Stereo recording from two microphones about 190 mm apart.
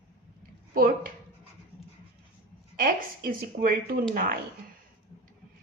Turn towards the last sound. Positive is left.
turn(degrees=-45)  # may be behind; listen again after turning